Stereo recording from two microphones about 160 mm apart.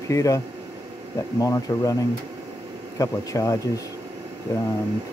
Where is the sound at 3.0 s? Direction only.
20° left (ahead or behind).